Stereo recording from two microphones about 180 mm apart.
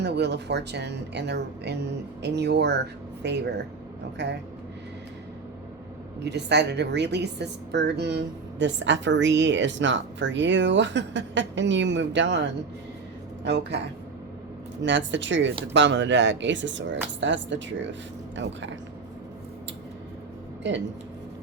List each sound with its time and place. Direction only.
0.0 s speech: 70° right (ahead or behind)
6.2 s a woman's voice: 70° right (ahead or behind)
13.4 s a woman's voice: 75° right (ahead or behind)